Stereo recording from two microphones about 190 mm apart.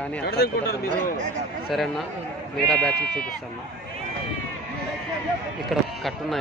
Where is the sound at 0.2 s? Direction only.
55° left (ahead or behind).